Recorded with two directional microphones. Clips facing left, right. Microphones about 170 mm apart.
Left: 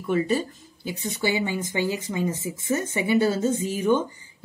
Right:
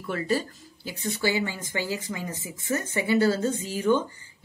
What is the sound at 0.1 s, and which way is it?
Speech, 20° left (ahead or behind).